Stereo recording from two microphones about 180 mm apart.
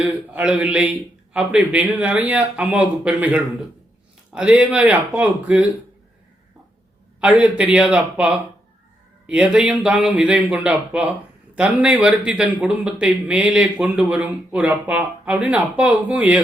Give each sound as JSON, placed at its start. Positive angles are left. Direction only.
{"t": 0.0, "sound": "a man's voice", "side_deg": -5}
{"t": 7.2, "sound": "a man's voice", "side_deg": -5}